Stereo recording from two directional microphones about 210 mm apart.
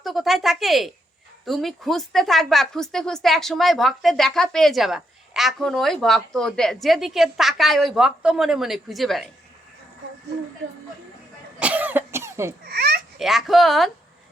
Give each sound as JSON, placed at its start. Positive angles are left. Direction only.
{"t": 0.0, "sound": "a woman's voice", "side_deg": 0}
{"t": 11.6, "sound": "cough", "side_deg": -10}
{"t": 12.6, "sound": "a child's voice", "side_deg": -50}
{"t": 13.1, "sound": "a woman's voice", "side_deg": 0}